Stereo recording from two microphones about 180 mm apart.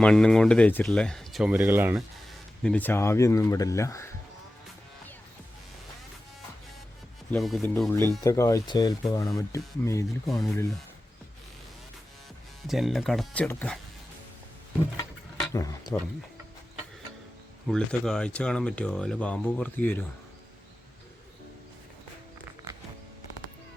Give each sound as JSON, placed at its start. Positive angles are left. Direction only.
{"t": 0.0, "sound": "speech", "side_deg": 5}
{"t": 2.6, "sound": "speech", "side_deg": 10}
{"t": 7.3, "sound": "speech", "side_deg": 0}
{"t": 10.2, "sound": "speech", "side_deg": 0}
{"t": 12.6, "sound": "speech", "side_deg": 0}
{"t": 15.5, "sound": "speech", "side_deg": 20}
{"t": 17.7, "sound": "speech", "side_deg": 5}